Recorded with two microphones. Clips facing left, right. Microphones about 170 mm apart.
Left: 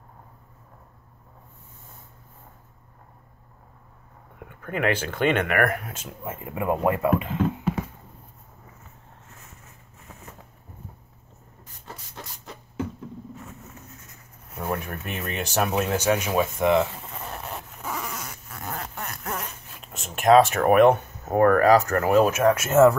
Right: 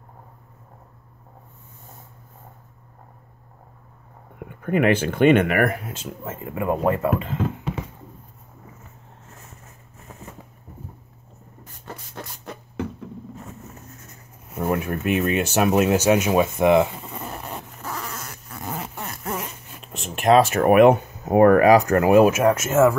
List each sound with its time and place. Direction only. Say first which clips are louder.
4.6 s speech: right 6 dB; 15° right (ahead or behind)
6.2 s speech: right 1 dB; 15° left (ahead or behind)
7.2 s a sound: left 2 dB; 5° left (ahead or behind)
12.2 s beatboxing: right 5 dB; 60° right (ahead or behind)
14.6 s speech: right 6 dB; 5° right (ahead or behind)
16.1 s speech: right 5 dB; 25° right (ahead or behind)
17.0 s a sound: right 2 dB; centre (ahead or behind)
18.2 s a sound: right 2 dB; centre (ahead or behind)
19.2 s zipper: right 5 dB; 5° right (ahead or behind)
22.3 s speech: right 1 dB; centre (ahead or behind)
22.6 s speech: left 1 dB; 15° right (ahead or behind)